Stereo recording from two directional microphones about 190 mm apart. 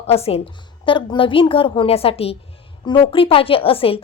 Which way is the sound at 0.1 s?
30° left (ahead or behind).